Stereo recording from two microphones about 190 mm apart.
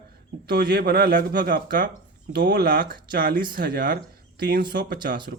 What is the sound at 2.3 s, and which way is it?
Speech, 65° right (ahead or behind).